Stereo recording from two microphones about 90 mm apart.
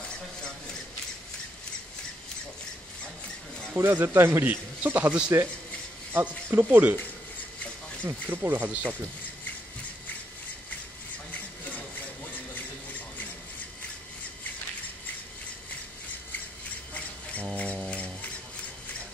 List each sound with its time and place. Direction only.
3.7 s a man's voice: 25° right (ahead or behind)
8.0 s a man's voice: 20° right (ahead or behind)
16.9 s a sound: 15° left (ahead or behind)